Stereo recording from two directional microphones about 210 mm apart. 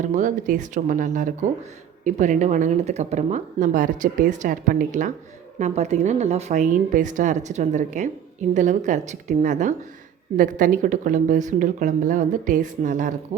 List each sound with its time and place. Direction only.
0.0 s a woman's voice: 35° right (ahead or behind)